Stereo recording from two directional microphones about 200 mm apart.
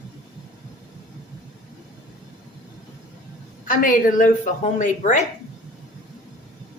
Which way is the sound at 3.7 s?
45° left (ahead or behind).